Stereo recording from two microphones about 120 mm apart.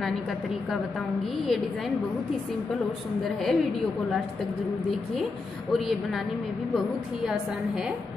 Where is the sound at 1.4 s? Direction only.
Centre (ahead or behind).